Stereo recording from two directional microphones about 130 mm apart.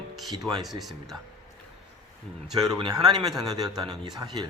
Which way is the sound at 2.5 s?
30° right (ahead or behind).